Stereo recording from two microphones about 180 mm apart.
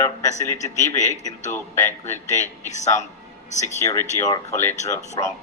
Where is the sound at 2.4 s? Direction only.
40° left (ahead or behind).